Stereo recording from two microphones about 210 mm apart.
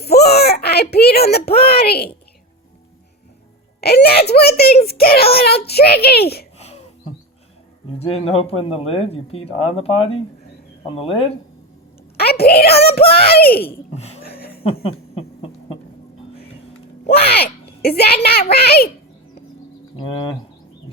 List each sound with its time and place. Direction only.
0.0 s a child's voice: 50° left (ahead or behind)
3.8 s a child's voice: 50° left (ahead or behind)
7.9 s speech: 30° left (ahead or behind)
12.1 s a woman's voice: 50° left (ahead or behind)
13.9 s speech: 30° left (ahead or behind)
14.3 s a sound: 45° left (ahead or behind)
14.8 s owl: 25° left (ahead or behind)
17.8 s a child's voice: 50° left (ahead or behind)